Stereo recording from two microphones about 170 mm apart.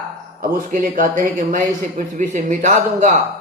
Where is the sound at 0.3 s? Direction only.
55° right (ahead or behind).